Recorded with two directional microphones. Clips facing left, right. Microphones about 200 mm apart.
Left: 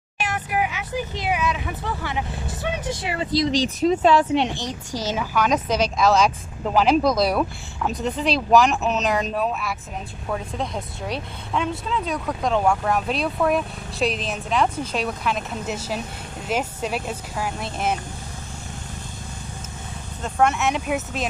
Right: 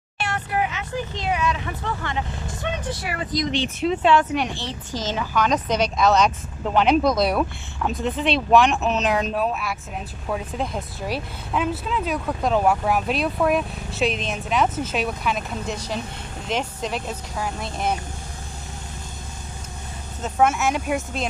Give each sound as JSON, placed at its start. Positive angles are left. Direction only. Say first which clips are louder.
{"t": 0.2, "sound": "speech", "louder": "even", "side_deg": 10}
{"t": 3.0, "sound": "speech", "louder": "left 6 dB", "side_deg": 25}
{"t": 4.6, "sound": "speech", "louder": "left 1 dB", "side_deg": 10}
{"t": 20.2, "sound": "speech", "louder": "right 1 dB", "side_deg": -5}